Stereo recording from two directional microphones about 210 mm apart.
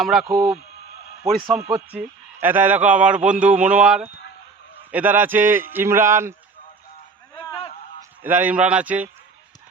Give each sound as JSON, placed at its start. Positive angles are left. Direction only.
{"t": 0.0, "sound": "speech", "side_deg": 0}
{"t": 1.5, "sound": "a man's voice", "side_deg": -10}
{"t": 7.3, "sound": "a sound", "side_deg": 25}
{"t": 8.2, "sound": "a man's voice", "side_deg": -10}